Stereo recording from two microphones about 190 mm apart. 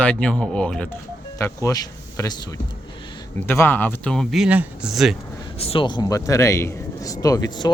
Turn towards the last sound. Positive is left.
turn(degrees=20)  # may be behind; listen again after turning